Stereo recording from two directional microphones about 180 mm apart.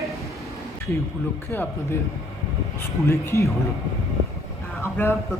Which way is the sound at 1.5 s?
15° left (ahead or behind).